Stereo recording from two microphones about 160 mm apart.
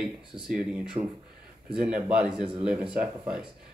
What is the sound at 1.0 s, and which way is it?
Speech, 30° right (ahead or behind).